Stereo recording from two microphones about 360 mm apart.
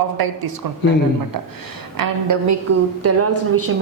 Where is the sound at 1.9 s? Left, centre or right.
Right.